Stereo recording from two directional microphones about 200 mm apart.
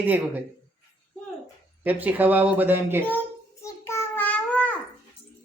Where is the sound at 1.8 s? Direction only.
10° right (ahead or behind).